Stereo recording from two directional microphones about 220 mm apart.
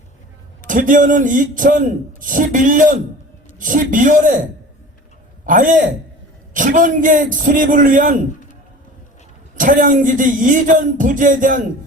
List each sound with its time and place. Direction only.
0.7 s a man's voice: 35° right (ahead or behind)
5.5 s a man's voice: 35° right (ahead or behind)
9.6 s a man's voice: 35° right (ahead or behind)